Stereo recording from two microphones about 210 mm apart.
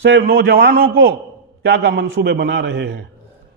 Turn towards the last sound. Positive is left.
turn(degrees=-50)  # may be behind; listen again after turning